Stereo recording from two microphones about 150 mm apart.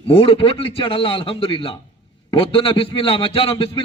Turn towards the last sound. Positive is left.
turn(degrees=35)  # may be behind; listen again after turning